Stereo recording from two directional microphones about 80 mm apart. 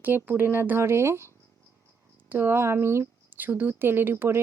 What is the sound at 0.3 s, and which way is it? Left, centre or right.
Speech, right.